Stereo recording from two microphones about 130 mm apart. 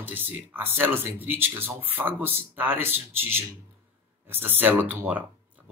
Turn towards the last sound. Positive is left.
turn(degrees=-15)  # may be behind; listen again after turning